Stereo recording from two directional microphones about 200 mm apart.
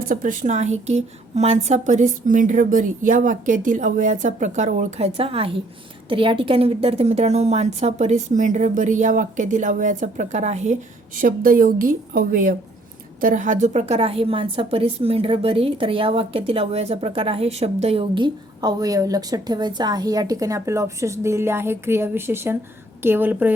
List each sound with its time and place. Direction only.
0.1 s a woman's voice: 45° right (ahead or behind); by 23.5 s 10° right (ahead or behind)